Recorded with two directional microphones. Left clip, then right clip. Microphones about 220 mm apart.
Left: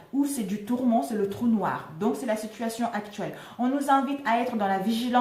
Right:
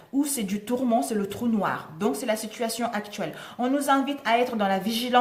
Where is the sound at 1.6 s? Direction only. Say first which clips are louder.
Right 1 dB; 45° right (ahead or behind).